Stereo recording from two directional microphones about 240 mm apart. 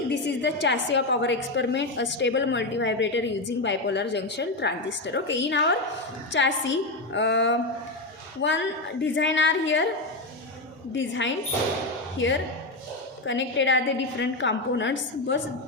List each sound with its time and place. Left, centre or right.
0.1 s a woman's voice: left
10.9 s a woman's voice: left